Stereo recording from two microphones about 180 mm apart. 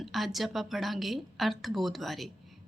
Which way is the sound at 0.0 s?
Centre (ahead or behind).